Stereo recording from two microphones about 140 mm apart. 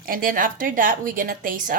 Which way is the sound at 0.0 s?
90° right.